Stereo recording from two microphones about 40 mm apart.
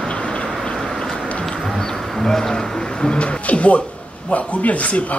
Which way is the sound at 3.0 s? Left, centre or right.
Left.